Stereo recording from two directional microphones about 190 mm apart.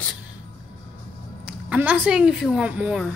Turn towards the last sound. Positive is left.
turn(degrees=-5)  # may be behind; listen again after turning